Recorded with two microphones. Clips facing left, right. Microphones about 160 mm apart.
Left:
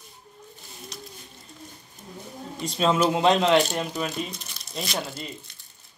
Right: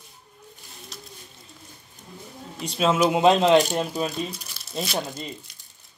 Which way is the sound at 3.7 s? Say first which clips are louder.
Right 3 dB; 35° right (ahead or behind).